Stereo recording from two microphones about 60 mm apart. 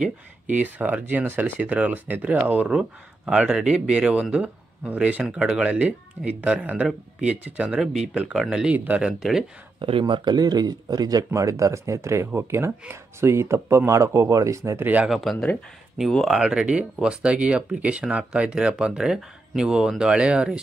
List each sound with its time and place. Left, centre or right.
0.6 s speech: right
2.7 s speech: centre
5.2 s speech: centre
8.7 s speech: right
9.0 s speech: centre
10.4 s speech: right
11.3 s speech: right
15.0 s speech: centre
16.3 s speech: centre